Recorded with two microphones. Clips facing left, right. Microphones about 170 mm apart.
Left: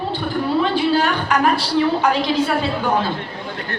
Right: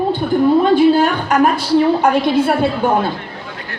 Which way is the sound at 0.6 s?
45° right (ahead or behind).